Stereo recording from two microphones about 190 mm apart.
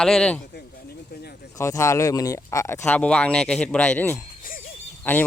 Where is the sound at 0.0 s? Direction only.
5° left (ahead or behind).